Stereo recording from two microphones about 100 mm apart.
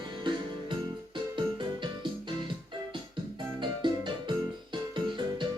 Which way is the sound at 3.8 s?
50° right (ahead or behind).